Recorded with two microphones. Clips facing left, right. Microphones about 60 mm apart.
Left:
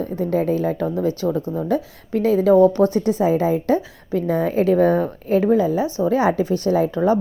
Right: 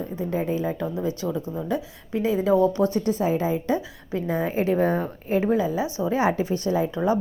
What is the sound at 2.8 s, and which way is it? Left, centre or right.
Speech, left.